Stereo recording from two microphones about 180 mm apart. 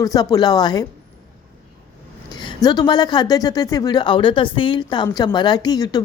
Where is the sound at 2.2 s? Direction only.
25° left (ahead or behind).